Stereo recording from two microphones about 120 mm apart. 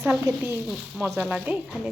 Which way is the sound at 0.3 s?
20° right (ahead or behind).